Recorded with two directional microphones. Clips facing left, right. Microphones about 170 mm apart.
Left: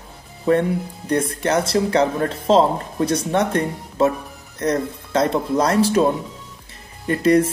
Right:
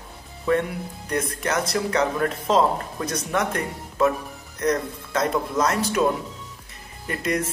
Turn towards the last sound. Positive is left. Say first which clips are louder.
# left 10 dB
turn(degrees=30)  # may be behind; listen again after turning